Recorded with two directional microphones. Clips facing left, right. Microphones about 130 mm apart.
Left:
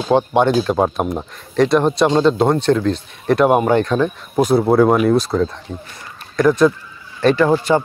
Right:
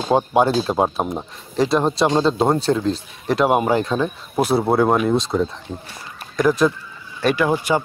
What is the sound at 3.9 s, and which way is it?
Speech, 5° right (ahead or behind).